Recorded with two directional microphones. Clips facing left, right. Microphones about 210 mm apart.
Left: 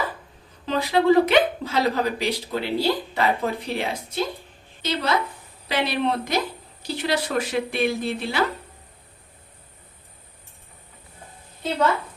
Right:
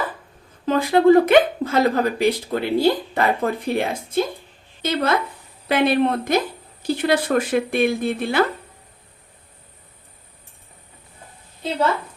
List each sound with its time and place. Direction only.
0.6 s a woman's voice: 50° right (ahead or behind)